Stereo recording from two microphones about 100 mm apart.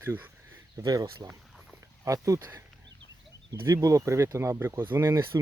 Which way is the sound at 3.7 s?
35° right (ahead or behind).